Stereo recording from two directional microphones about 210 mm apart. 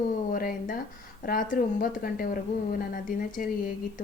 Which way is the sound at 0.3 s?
45° left (ahead or behind).